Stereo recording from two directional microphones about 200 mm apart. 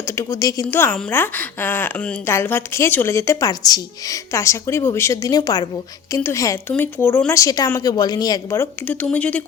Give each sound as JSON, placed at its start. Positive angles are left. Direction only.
{"t": 0.0, "sound": "a woman's voice", "side_deg": 15}